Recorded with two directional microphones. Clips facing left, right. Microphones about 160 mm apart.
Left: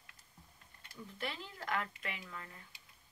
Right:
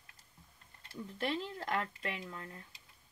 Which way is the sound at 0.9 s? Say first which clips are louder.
Right 7 dB; 30° right (ahead or behind).